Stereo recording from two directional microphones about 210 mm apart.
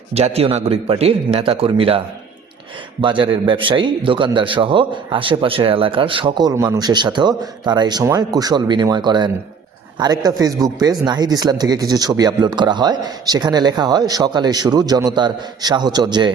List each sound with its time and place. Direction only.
0.1 s a man's voice: 30° right (ahead or behind)
3.0 s a man's voice: 25° right (ahead or behind)